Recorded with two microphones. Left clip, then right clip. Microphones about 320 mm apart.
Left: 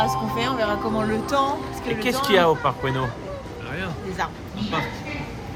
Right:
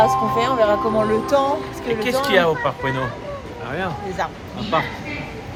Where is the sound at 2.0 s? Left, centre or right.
Centre.